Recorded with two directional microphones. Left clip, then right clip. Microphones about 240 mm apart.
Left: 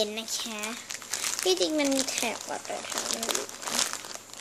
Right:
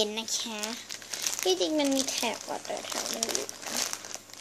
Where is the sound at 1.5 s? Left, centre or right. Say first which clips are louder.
Left 1 dB; centre.